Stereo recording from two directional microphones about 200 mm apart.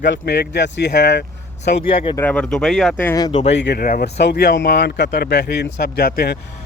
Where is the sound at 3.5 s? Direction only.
55° left (ahead or behind).